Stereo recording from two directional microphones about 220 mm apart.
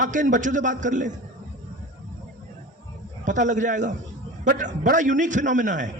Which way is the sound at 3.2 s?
35° right (ahead or behind).